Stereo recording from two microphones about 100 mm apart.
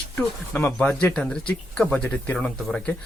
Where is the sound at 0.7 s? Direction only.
10° left (ahead or behind).